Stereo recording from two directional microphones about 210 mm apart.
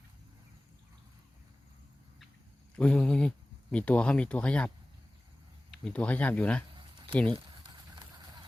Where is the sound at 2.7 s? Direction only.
5° left (ahead or behind).